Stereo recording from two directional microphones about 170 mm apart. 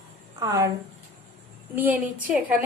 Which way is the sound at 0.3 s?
20° right (ahead or behind).